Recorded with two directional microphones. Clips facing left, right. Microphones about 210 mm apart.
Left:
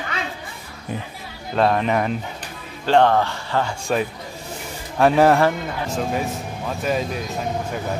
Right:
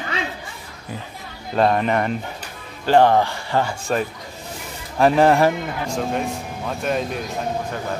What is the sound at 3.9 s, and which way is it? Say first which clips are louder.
Speech: left 3 dB; 5° left (ahead or behind).